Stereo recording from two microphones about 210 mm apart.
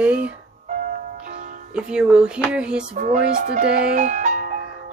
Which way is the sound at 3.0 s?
40° right (ahead or behind).